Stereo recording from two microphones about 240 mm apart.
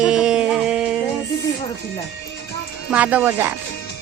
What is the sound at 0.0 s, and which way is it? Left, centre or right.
Music, centre.